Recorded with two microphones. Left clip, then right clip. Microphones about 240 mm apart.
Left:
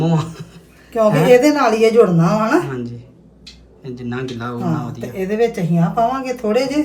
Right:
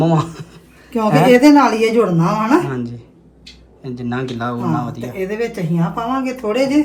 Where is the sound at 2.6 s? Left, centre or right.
Centre.